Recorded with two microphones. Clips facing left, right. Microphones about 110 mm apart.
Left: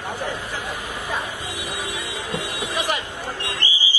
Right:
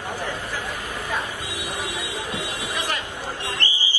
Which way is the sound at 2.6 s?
15° left (ahead or behind).